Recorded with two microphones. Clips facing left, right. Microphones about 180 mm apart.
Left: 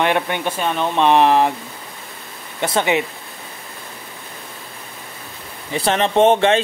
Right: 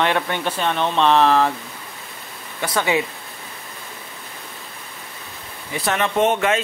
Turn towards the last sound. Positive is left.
turn(degrees=30)  # may be behind; listen again after turning